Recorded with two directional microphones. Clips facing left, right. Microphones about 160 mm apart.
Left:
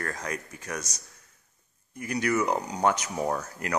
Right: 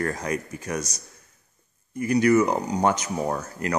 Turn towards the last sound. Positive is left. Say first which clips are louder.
# right 2 dB
turn(degrees=-5)  # may be behind; listen again after turning